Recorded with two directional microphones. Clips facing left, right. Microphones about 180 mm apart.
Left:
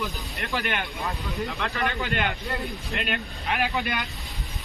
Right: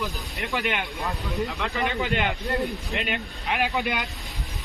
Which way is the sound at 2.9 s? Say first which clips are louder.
Even; 60° left (ahead or behind).